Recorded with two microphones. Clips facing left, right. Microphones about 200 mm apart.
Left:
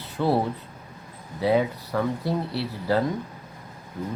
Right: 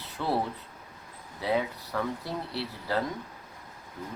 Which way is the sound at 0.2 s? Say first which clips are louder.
Left 6 dB; 30° left (ahead or behind).